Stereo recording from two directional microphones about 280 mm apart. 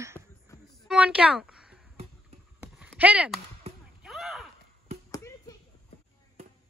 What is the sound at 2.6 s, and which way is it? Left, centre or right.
Clip-clop, centre.